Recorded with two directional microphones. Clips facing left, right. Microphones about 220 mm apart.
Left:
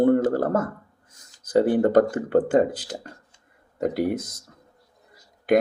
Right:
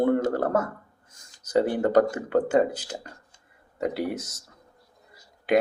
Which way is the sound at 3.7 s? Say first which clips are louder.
Left 4 dB; 45° left (ahead or behind).